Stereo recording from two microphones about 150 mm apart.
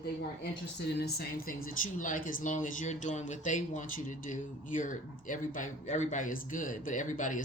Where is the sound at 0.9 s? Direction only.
90° left.